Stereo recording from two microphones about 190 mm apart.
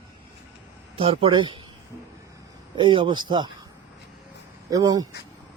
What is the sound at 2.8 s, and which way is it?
Speech, 25° right (ahead or behind).